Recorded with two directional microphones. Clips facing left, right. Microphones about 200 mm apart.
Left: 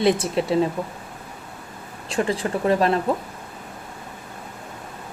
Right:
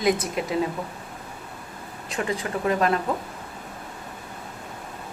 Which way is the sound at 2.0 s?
30° left (ahead or behind).